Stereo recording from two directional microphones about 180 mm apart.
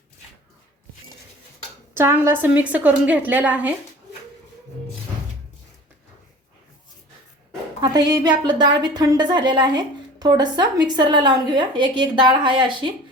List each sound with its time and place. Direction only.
2.0 s a woman's voice: 15° right (ahead or behind)
7.8 s a woman's voice: 20° right (ahead or behind)